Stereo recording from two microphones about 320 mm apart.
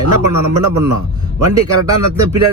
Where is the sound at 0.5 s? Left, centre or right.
Right.